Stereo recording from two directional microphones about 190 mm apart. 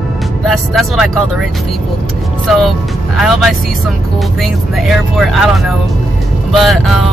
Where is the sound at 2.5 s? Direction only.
Centre (ahead or behind).